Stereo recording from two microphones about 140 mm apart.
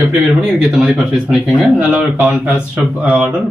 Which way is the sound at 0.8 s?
Centre (ahead or behind).